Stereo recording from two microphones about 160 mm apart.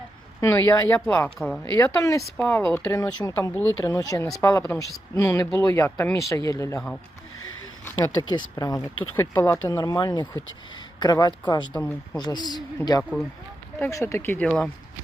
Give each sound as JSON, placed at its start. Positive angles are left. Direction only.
{"t": 0.4, "sound": "speech", "side_deg": 20}
{"t": 1.4, "sound": "speech", "side_deg": 0}
{"t": 1.7, "sound": "speech", "side_deg": 20}
{"t": 6.7, "sound": "speech", "side_deg": 5}
{"t": 8.3, "sound": "speech", "side_deg": 25}
{"t": 13.0, "sound": "speech", "side_deg": 5}